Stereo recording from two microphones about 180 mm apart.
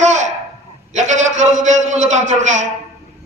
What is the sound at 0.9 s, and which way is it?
A man's voice, 40° right (ahead or behind).